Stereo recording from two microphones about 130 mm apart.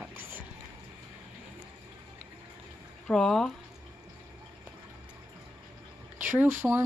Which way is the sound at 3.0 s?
5° left (ahead or behind).